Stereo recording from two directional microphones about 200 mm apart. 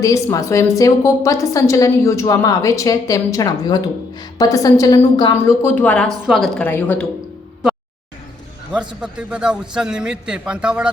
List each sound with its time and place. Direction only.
0.0 s a woman's voice: 15° left (ahead or behind)
8.7 s a man's voice: 5° right (ahead or behind)